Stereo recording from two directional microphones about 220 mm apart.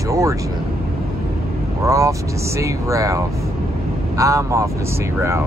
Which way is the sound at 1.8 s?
15° right (ahead or behind).